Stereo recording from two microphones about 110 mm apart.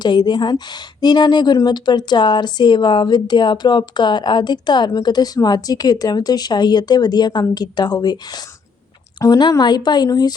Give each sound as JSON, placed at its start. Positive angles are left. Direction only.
{"t": 0.0, "sound": "speech", "side_deg": 40}
{"t": 9.2, "sound": "speech", "side_deg": 35}